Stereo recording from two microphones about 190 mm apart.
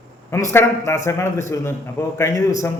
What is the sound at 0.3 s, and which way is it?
A man's voice, 15° left (ahead or behind).